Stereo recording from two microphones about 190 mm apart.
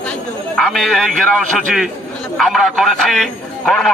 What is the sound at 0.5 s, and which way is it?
A man's voice, centre (ahead or behind).